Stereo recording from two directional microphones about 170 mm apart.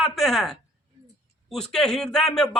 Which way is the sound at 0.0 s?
Centre (ahead or behind).